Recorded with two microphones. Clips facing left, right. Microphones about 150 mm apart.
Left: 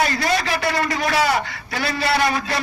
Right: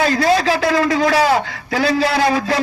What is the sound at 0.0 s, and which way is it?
A man's voice, 90° right.